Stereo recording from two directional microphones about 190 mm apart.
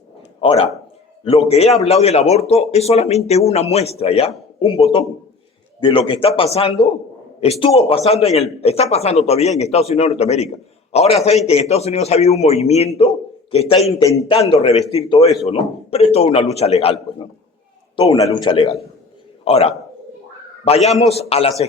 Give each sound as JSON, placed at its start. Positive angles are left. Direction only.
{"t": 0.4, "sound": "a man's voice", "side_deg": 30}